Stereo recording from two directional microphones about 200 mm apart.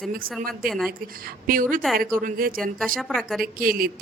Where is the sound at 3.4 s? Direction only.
45° right (ahead or behind).